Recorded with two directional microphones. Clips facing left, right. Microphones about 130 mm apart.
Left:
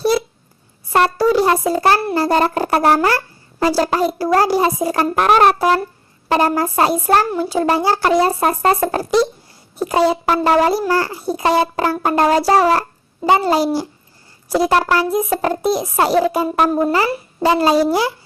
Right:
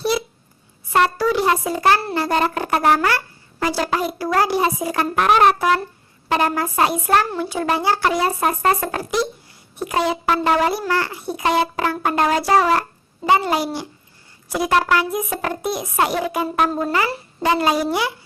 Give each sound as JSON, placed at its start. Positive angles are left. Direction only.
{"t": 0.9, "sound": "a child's voice", "side_deg": 40}
{"t": 16.6, "sound": "speech", "side_deg": 20}
{"t": 17.4, "sound": "a child's voice", "side_deg": 30}